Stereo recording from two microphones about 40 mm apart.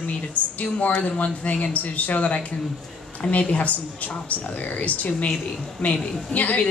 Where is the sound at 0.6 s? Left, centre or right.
Left.